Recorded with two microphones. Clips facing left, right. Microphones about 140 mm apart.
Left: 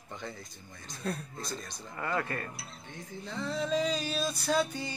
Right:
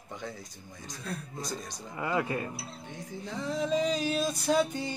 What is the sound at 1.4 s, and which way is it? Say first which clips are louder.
Music: right 2 dB; 15° right (ahead or behind).